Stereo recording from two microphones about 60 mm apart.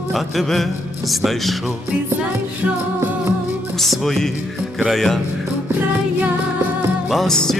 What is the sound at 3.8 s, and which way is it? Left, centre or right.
Music, centre.